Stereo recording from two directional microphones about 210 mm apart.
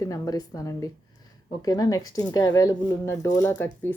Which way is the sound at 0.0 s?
15° left (ahead or behind).